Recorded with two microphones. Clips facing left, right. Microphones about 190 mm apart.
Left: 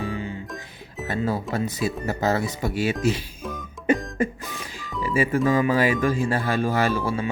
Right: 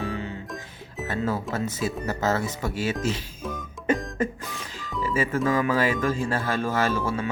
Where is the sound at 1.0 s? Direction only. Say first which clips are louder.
Left 2 dB; 15° left (ahead or behind).